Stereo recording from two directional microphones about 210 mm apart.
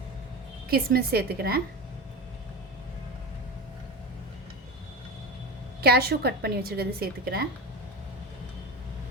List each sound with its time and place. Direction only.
0.7 s a woman's voice: 45° right (ahead or behind)
5.8 s a woman's voice: 50° right (ahead or behind)